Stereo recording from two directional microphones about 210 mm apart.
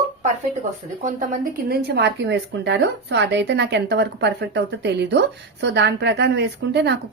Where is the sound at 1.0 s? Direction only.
35° right (ahead or behind).